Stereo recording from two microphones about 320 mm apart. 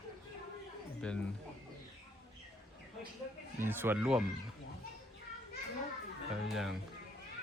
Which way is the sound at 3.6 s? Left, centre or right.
Centre.